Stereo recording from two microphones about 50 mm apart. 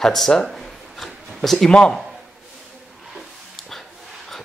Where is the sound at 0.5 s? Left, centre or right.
Centre.